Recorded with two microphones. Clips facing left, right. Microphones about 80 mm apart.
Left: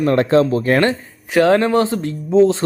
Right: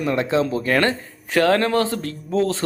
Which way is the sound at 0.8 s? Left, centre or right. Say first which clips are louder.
Left 3 dB; centre.